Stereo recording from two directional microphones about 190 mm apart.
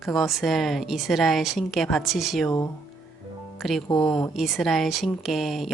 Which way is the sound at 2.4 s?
20° left (ahead or behind).